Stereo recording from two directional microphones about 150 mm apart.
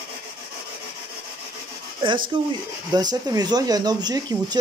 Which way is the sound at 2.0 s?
35° right (ahead or behind).